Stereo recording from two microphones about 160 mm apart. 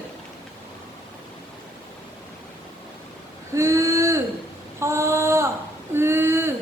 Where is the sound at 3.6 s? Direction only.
20° right (ahead or behind).